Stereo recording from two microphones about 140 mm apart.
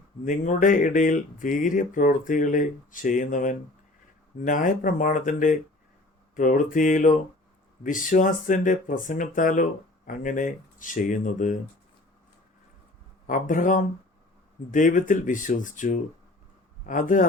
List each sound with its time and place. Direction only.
0.3 s speech: 65° left (ahead or behind)
13.2 s a man's voice: 70° left (ahead or behind)